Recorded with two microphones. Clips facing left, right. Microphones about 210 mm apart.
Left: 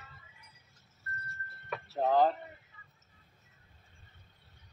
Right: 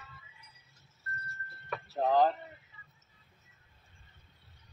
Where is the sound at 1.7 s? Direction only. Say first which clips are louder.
Even; centre (ahead or behind).